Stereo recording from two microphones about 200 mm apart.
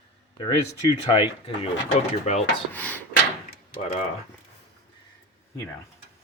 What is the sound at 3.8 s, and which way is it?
Speech, 35° left (ahead or behind).